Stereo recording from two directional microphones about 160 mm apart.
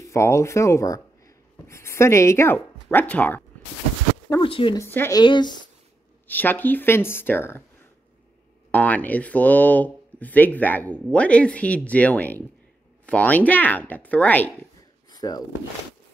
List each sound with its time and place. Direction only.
0.0 s speech: 20° left (ahead or behind)
4.4 s speech: 35° left (ahead or behind)
4.7 s speech: 15° left (ahead or behind)
5.2 s speech: 30° left (ahead or behind)
6.2 s speech: 10° left (ahead or behind)
8.7 s speech: 10° left (ahead or behind)
15.0 s a sound: 25° left (ahead or behind)